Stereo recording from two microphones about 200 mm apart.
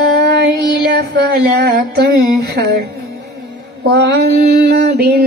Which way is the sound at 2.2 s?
50° right (ahead or behind).